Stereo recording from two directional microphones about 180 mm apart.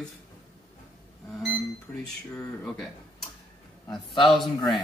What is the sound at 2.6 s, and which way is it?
Speech, centre (ahead or behind).